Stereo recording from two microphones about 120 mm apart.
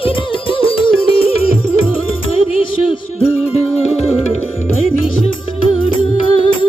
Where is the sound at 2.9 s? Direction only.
55° left (ahead or behind).